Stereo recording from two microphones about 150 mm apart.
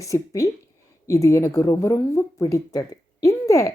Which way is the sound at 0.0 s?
20° left (ahead or behind).